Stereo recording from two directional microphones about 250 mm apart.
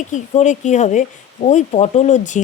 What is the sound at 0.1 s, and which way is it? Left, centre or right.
Speech, left.